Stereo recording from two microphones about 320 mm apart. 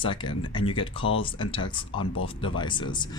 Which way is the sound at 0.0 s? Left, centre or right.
Centre.